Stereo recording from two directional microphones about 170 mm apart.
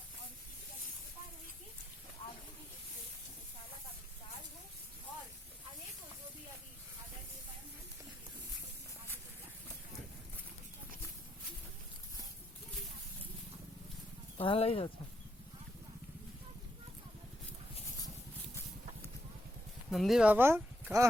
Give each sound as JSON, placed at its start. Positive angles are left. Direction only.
{"t": 14.3, "sound": "speech", "side_deg": 35}
{"t": 19.9, "sound": "speech", "side_deg": 0}